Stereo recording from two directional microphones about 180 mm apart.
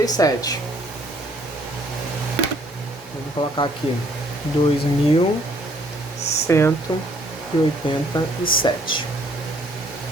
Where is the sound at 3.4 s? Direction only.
30° left (ahead or behind).